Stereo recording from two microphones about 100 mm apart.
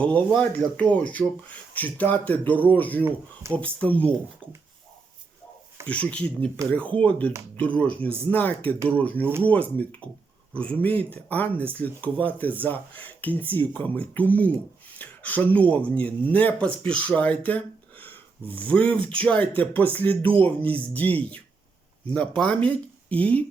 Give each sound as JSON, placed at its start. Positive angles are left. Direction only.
{"t": 0.0, "sound": "speech", "side_deg": 10}
{"t": 5.8, "sound": "speech", "side_deg": 10}